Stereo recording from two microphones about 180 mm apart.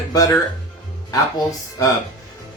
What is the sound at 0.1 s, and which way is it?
Speech, 20° left (ahead or behind).